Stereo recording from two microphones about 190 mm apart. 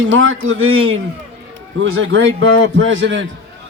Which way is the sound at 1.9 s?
85° right.